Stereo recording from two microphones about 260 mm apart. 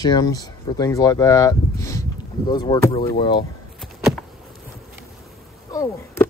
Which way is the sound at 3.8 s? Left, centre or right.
Centre.